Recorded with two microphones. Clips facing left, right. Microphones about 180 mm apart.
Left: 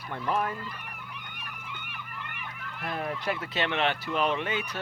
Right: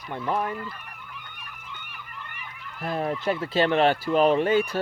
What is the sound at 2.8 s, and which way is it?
Speech, 30° right (ahead or behind).